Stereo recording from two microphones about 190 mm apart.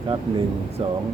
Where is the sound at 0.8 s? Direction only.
30° right (ahead or behind).